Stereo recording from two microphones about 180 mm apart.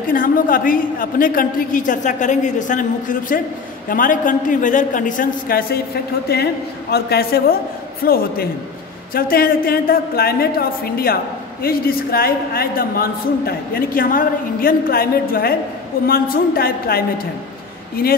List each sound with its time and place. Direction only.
0.1 s a woman's voice: 50° left (ahead or behind)